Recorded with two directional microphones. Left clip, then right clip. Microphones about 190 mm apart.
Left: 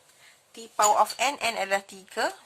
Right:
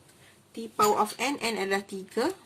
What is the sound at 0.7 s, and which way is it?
Speech, 40° left (ahead or behind).